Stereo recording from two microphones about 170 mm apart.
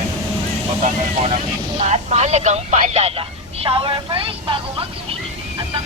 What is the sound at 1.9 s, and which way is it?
Speech, 40° right (ahead or behind).